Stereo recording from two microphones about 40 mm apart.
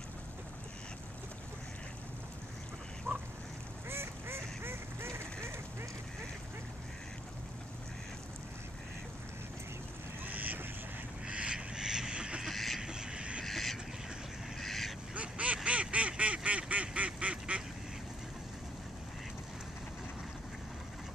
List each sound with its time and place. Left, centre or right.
3.1 s duck: right
3.9 s duck: right
10.2 s duck: right
11.2 s duck: right
12.4 s vehicle: centre
12.8 s vehicle: centre
13.4 s duck: centre
15.1 s duck: right